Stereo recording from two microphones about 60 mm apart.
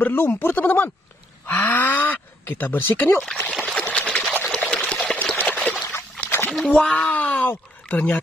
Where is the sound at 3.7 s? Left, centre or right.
Left.